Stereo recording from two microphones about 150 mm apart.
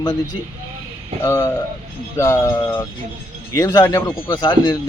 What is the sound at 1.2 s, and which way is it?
Speech, 15° left (ahead or behind).